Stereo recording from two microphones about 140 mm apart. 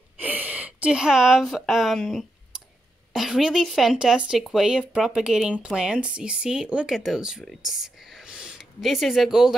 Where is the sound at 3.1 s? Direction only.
Centre (ahead or behind).